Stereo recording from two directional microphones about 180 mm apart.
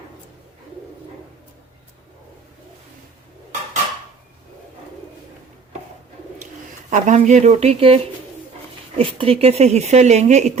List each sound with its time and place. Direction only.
6.9 s speech: 40° right (ahead or behind)